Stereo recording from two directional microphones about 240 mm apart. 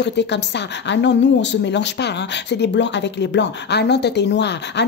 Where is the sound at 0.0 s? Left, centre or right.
Left.